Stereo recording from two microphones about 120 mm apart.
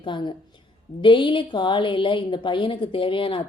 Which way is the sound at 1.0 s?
45° left (ahead or behind).